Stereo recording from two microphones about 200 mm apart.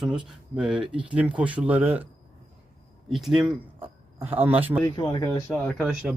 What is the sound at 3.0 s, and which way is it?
Speech, centre (ahead or behind).